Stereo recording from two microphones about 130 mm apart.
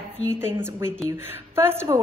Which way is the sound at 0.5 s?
15° right (ahead or behind).